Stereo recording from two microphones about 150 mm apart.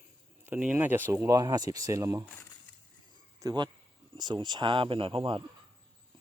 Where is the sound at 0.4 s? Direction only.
10° right (ahead or behind).